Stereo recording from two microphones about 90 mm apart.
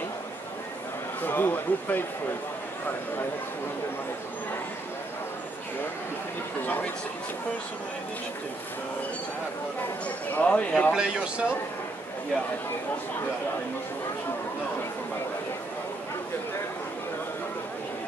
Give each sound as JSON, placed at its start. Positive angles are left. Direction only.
{"t": 1.2, "sound": "speech", "side_deg": 20}
{"t": 6.6, "sound": "speech", "side_deg": 20}
{"t": 10.0, "sound": "speech", "side_deg": 15}
{"t": 10.9, "sound": "speech", "side_deg": -10}